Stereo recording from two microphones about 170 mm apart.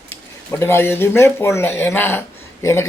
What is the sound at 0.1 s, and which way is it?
Speech, 15° left (ahead or behind).